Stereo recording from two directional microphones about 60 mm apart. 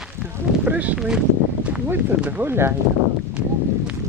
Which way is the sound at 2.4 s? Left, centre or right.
Right.